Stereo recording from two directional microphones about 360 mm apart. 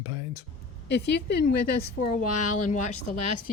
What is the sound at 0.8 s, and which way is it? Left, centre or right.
A woman's voice, left.